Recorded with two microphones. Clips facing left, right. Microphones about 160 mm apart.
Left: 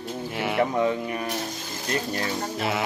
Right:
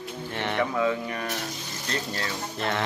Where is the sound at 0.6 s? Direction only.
30° left (ahead or behind).